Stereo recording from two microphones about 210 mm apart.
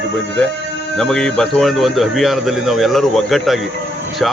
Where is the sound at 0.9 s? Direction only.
5° left (ahead or behind).